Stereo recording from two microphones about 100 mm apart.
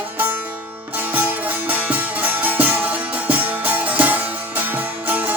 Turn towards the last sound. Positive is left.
turn(degrees=-20)  # may be behind; listen again after turning